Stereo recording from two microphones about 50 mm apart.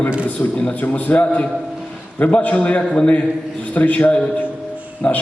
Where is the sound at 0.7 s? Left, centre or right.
Left.